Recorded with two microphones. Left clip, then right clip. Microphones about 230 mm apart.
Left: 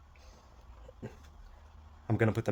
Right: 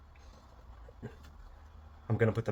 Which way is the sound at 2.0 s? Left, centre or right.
Left.